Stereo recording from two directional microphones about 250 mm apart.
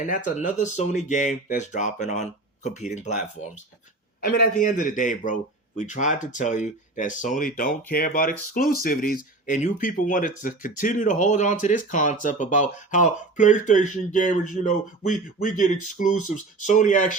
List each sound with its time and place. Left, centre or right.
0.1 s a man's voice: left